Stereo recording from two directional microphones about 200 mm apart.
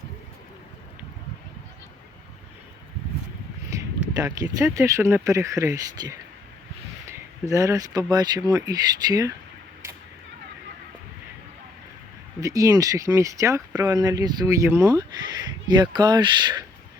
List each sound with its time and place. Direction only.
3.7 s a sound: 15° right (ahead or behind)
4.1 s speech: 15° right (ahead or behind)
12.4 s speech: 15° right (ahead or behind)